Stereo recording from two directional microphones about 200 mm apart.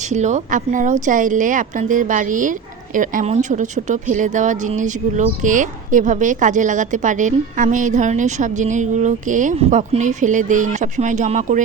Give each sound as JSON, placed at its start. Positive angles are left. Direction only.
{"t": 0.1, "sound": "a woman's voice", "side_deg": -35}